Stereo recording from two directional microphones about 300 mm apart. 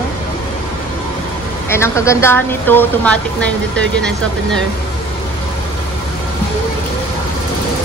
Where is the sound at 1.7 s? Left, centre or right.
Centre.